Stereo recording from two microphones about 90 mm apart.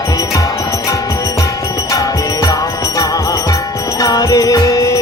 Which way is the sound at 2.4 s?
45° left (ahead or behind).